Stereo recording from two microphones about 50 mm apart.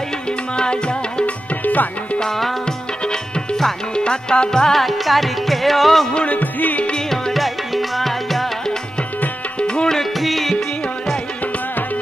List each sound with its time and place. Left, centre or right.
0.6 s music: centre
1.6 s music: left
2.1 s music: centre
6.1 s music: left
7.1 s music: centre
9.7 s music: centre
10.1 s music: centre